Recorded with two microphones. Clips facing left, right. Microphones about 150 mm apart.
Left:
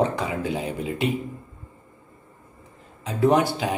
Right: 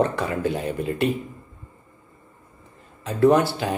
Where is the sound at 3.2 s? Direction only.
15° left (ahead or behind).